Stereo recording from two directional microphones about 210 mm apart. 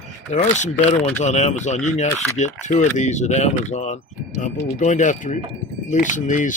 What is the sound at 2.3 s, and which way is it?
Speech, 35° left (ahead or behind).